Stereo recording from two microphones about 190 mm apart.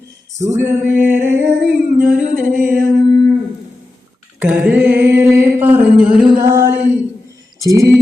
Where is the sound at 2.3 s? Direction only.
45° right (ahead or behind).